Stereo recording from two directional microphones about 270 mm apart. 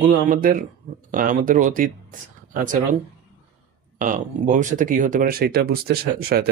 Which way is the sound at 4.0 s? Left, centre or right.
Right.